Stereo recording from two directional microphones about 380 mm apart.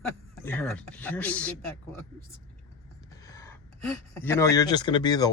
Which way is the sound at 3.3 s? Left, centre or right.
Centre.